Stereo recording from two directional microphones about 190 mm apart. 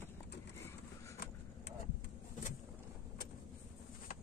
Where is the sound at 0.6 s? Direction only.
15° left (ahead or behind).